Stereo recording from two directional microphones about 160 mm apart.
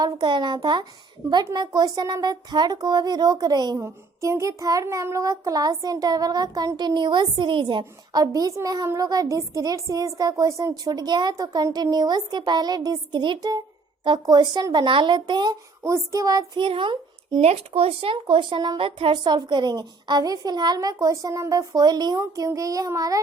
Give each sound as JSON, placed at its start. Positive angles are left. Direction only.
{"t": 0.0, "sound": "a child's voice", "side_deg": -30}